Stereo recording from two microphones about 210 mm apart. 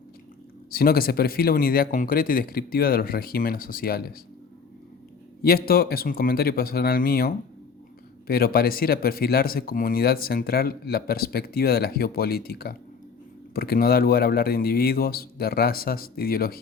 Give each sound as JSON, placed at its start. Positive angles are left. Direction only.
{"t": 0.7, "sound": "speech", "side_deg": 45}
{"t": 5.4, "sound": "speech", "side_deg": 45}